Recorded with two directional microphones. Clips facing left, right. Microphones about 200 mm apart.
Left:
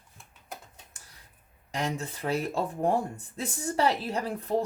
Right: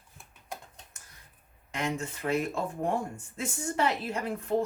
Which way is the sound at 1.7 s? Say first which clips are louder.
Left 1 dB; 35° left (ahead or behind).